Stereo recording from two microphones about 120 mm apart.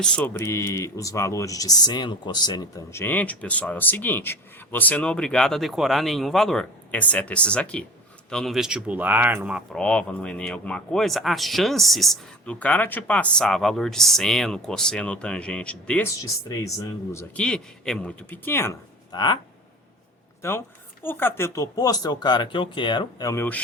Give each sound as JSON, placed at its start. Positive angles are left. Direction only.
{"t": 0.0, "sound": "speech", "side_deg": 5}
{"t": 0.3, "sound": "speech", "side_deg": 25}
{"t": 9.7, "sound": "speech", "side_deg": 5}
{"t": 16.0, "sound": "speech", "side_deg": 25}
{"t": 17.3, "sound": "speech", "side_deg": 5}
{"t": 19.1, "sound": "speech", "side_deg": 35}
{"t": 21.0, "sound": "speech", "side_deg": 15}